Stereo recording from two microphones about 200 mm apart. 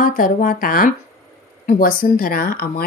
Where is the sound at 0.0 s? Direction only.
45° left (ahead or behind).